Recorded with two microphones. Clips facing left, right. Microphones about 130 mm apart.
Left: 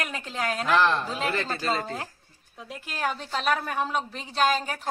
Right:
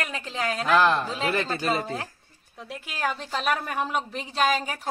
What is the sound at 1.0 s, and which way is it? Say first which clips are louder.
A woman's voice: right 2 dB; centre (ahead or behind).